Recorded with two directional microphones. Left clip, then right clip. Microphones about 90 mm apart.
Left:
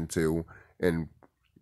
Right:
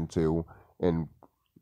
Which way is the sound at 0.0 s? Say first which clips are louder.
Even; 10° right (ahead or behind).